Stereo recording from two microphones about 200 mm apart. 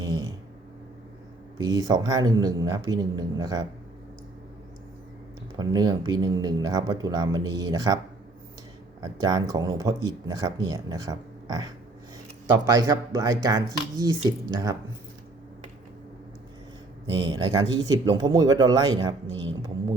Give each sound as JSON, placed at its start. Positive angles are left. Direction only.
{"t": 0.0, "sound": "a sound", "side_deg": -20}
{"t": 1.5, "sound": "speech", "side_deg": -20}
{"t": 5.5, "sound": "speech", "side_deg": -20}
{"t": 9.0, "sound": "speech", "side_deg": -20}
{"t": 17.1, "sound": "speech", "side_deg": -20}